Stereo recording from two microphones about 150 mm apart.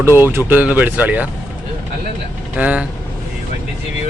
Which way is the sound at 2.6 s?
10° right (ahead or behind).